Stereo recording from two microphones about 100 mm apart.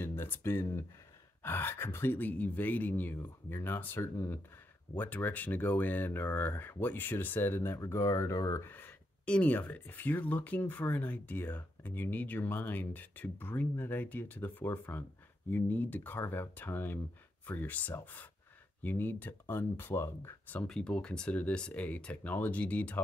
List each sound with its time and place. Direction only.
0.0 s speech: 20° left (ahead or behind)
8.6 s speech: 20° left (ahead or behind)
20.5 s speech: 10° left (ahead or behind)